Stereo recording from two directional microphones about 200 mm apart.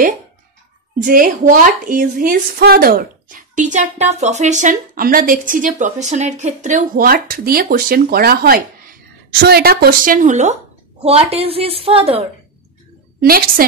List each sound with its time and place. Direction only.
1.0 s a woman's voice: 45° right (ahead or behind); by 12.2 s 30° right (ahead or behind)
13.2 s a woman's voice: 50° right (ahead or behind)